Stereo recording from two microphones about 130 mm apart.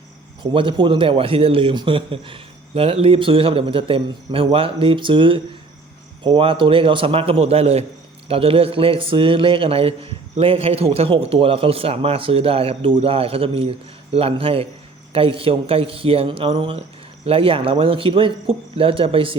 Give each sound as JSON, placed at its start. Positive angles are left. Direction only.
{"t": 0.5, "sound": "a man's voice", "side_deg": -40}